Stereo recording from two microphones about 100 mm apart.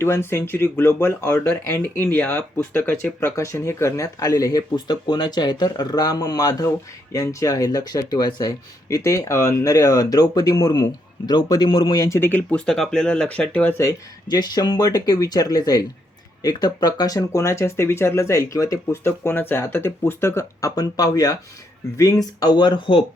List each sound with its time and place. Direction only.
0.0 s speech: 25° left (ahead or behind)
12.2 s speech: 20° left (ahead or behind)
13.7 s speech: 40° left (ahead or behind)
19.0 s speech: 20° left (ahead or behind); by 23.0 s 55° left (ahead or behind)